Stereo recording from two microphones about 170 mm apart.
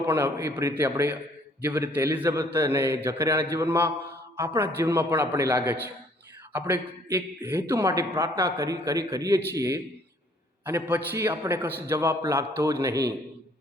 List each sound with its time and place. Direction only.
0.0 s a man's voice: 10° right (ahead or behind)